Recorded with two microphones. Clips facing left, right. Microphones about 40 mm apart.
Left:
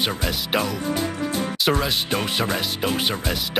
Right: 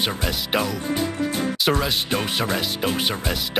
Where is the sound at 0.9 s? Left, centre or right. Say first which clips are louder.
Right 1 dB; right.